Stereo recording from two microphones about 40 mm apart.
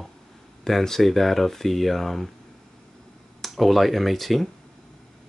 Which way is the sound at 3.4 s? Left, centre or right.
Centre.